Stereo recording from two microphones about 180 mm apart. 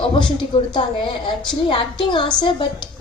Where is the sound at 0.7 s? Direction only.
25° left (ahead or behind).